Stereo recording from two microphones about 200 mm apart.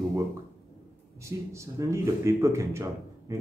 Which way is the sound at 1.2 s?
15° right (ahead or behind).